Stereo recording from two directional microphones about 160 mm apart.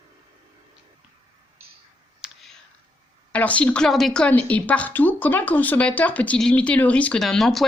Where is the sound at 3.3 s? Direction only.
10° left (ahead or behind).